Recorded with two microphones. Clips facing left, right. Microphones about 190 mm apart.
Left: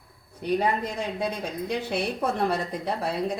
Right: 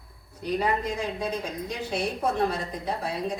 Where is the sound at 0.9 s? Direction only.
60° left (ahead or behind).